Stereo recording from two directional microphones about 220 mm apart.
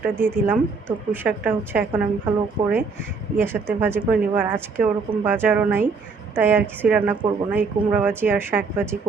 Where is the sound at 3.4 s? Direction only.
10° right (ahead or behind).